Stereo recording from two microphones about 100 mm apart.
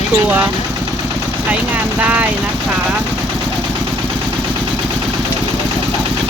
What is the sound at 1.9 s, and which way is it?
Speech, 15° right (ahead or behind).